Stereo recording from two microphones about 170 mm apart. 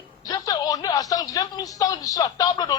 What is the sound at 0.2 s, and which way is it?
Speech, 20° left (ahead or behind).